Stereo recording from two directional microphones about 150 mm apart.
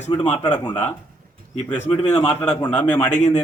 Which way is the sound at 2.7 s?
10° left (ahead or behind).